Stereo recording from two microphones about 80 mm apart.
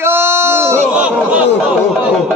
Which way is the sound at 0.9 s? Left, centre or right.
Centre.